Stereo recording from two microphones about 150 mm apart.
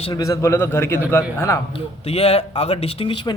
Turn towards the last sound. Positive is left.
turn(degrees=35)  # may be behind; listen again after turning